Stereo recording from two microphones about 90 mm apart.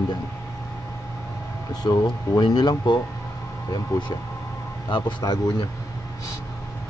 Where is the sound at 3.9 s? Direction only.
35° left (ahead or behind).